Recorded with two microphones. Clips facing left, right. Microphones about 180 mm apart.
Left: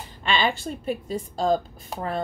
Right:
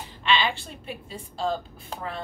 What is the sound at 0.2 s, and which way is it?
A woman's voice, 45° left (ahead or behind).